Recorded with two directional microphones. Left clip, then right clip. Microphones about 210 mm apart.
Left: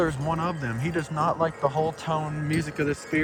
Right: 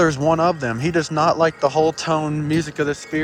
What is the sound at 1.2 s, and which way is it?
Speech, 50° left (ahead or behind).